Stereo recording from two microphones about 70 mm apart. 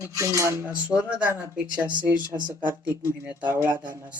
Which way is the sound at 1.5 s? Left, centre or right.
Centre.